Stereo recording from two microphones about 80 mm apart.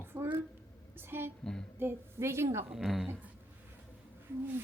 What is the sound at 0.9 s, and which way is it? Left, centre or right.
A woman's voice, right.